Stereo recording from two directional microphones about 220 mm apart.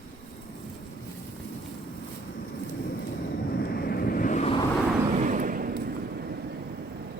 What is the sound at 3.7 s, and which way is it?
Vehicle, 45° left (ahead or behind).